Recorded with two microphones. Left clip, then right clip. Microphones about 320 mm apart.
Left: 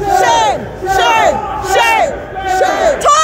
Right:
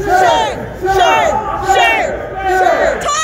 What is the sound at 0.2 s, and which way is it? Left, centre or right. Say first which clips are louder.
Crowd: left 1 dB; centre.